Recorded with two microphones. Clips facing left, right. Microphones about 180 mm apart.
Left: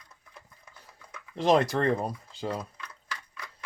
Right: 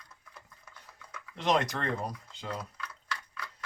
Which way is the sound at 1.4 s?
30° left (ahead or behind).